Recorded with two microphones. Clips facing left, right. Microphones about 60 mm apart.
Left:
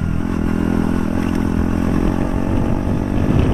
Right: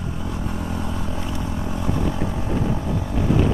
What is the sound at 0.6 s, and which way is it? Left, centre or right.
Vehicle, left.